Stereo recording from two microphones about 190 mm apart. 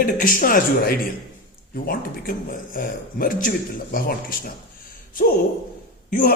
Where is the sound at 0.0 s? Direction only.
45° left (ahead or behind).